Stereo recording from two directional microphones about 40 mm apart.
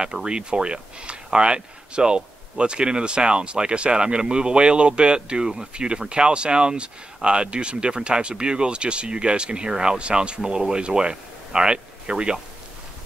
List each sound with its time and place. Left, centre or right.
0.0 s speech: right